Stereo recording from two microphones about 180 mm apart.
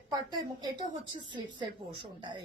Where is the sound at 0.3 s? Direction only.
25° right (ahead or behind).